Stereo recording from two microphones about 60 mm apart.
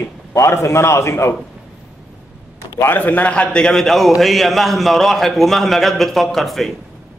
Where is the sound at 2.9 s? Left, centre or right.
Left.